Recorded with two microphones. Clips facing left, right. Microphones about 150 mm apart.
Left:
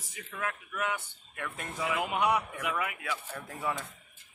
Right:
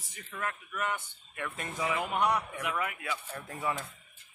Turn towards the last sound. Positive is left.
turn(degrees=0)  # may be behind; listen again after turning